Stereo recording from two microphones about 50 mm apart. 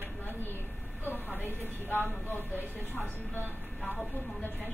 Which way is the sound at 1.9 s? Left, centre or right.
Left.